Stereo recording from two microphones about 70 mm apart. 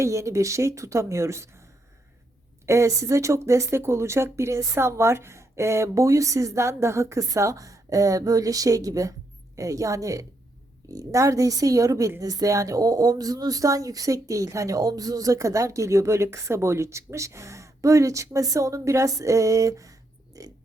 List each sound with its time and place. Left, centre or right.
0.0 s a woman's voice: right
2.6 s a woman's voice: right